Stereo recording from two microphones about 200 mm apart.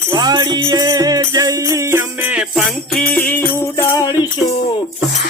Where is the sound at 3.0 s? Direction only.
10° left (ahead or behind).